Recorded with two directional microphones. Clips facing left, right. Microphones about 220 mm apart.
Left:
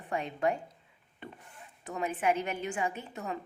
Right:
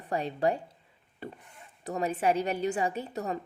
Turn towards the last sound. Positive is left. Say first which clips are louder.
# right 5 dB
turn(degrees=-40)  # may be behind; listen again after turning